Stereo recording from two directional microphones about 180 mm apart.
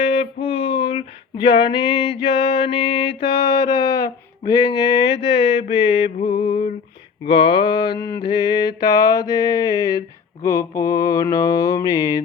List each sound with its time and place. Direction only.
0.0 s female singing: 30° left (ahead or behind)